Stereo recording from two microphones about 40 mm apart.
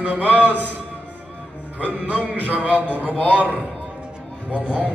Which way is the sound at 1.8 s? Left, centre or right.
Right.